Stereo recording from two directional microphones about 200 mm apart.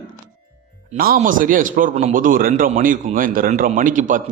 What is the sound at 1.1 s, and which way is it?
A man's voice, 40° right (ahead or behind).